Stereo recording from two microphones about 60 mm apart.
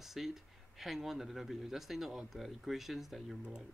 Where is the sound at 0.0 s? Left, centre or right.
Centre.